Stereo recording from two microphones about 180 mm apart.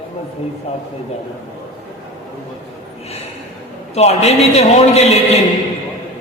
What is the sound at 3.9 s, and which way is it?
A man's voice, 35° left (ahead or behind).